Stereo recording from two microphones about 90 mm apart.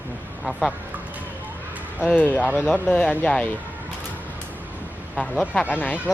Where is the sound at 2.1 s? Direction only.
15° left (ahead or behind).